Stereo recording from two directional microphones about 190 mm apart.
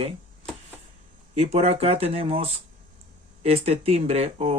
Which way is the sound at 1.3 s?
35° right (ahead or behind).